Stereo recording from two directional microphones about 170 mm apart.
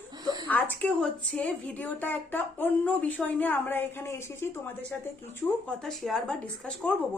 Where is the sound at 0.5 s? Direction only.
10° left (ahead or behind).